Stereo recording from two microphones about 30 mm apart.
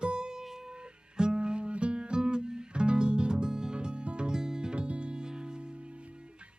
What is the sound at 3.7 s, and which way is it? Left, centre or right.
Music, right.